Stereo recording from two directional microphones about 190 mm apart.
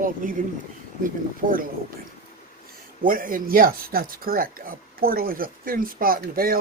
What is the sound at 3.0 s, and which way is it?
Speech, 50° right (ahead or behind).